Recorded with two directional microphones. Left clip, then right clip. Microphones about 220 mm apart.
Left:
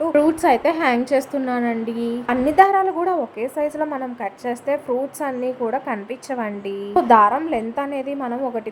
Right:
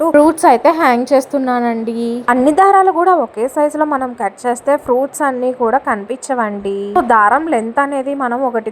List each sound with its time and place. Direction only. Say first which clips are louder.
0.0 s a woman's voice: right 8 dB; 25° right (ahead or behind)